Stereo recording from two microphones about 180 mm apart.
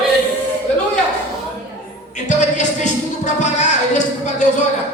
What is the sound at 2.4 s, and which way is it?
Music, 40° left (ahead or behind).